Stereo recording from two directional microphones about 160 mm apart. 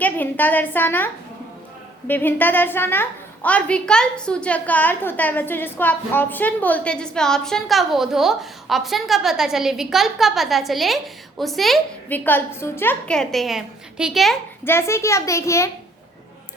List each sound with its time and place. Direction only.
0.0 s a woman's voice: 10° left (ahead or behind)
12.0 s a woman's voice: 10° left (ahead or behind)
14.6 s a woman's voice: 15° left (ahead or behind)